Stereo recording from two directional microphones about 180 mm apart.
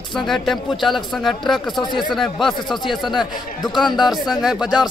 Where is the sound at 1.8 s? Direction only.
25° left (ahead or behind).